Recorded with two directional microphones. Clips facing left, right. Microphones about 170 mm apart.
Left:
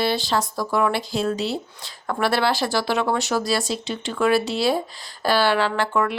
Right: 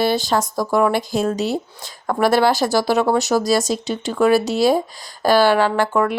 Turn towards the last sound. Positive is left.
turn(degrees=-45)  # may be behind; listen again after turning